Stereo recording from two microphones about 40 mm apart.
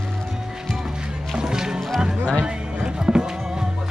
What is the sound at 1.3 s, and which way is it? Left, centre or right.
Music, centre.